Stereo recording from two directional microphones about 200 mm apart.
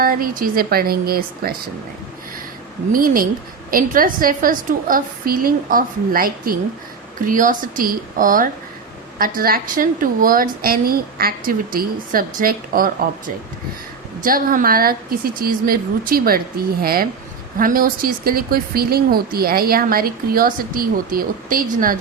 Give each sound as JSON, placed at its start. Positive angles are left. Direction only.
{"t": 0.0, "sound": "speech", "side_deg": -45}
{"t": 2.9, "sound": "speech", "side_deg": -45}